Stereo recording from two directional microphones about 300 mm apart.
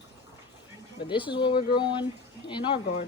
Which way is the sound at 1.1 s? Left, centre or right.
Centre.